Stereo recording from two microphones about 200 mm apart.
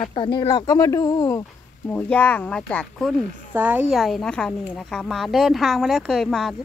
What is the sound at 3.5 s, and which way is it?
A woman's voice, 10° right (ahead or behind).